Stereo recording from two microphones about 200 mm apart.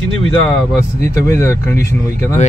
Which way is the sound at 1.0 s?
15° left (ahead or behind).